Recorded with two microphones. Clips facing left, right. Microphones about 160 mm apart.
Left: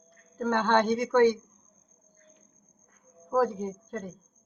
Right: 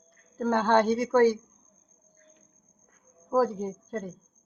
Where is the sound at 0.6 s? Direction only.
35° right (ahead or behind).